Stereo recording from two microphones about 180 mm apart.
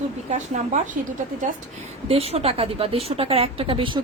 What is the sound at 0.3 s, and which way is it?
Speech, 40° right (ahead or behind).